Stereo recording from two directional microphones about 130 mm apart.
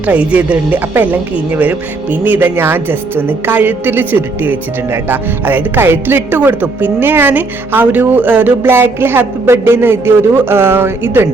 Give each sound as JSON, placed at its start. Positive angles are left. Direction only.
{"t": 0.0, "sound": "speech", "side_deg": -10}